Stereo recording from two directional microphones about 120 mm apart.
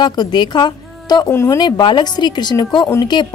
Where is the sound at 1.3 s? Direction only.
25° left (ahead or behind).